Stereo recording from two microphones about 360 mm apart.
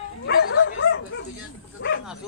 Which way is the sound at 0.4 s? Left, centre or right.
Left.